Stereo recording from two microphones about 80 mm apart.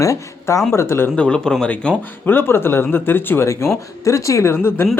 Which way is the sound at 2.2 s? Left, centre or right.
Left.